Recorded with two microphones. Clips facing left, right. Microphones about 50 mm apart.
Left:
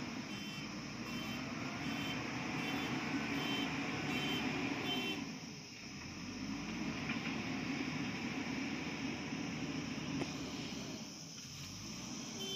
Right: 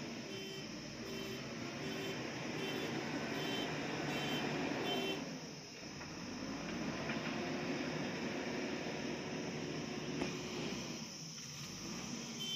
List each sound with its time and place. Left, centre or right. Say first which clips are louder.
2.0 s vehicle: left 2 dB; left
3.7 s vehicle: left 1 dB; centre
6.9 s train: left 1 dB; centre